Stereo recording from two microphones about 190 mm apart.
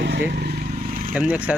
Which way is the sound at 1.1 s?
10° right (ahead or behind).